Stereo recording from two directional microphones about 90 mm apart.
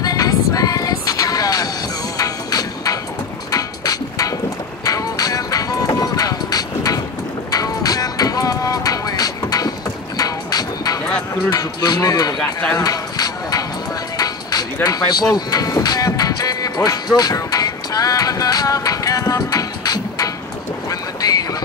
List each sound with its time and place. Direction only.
0.0 s vehicle: 45° left (ahead or behind)
2.1 s music: 40° left (ahead or behind)
3.5 s livestock: 45° left (ahead or behind)
4.8 s music: 45° left (ahead or behind)
11.5 s speech: 45° left (ahead or behind)
12.7 s music: 45° left (ahead or behind)
14.1 s livestock: 45° left (ahead or behind)
16.1 s music: 45° left (ahead or behind)
20.9 s boat: 45° left (ahead or behind)